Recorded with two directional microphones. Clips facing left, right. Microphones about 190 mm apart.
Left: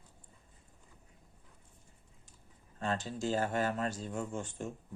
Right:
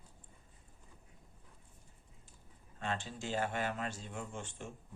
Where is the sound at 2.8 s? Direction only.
40° left (ahead or behind).